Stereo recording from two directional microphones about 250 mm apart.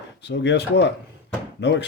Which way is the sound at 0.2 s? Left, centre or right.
Left.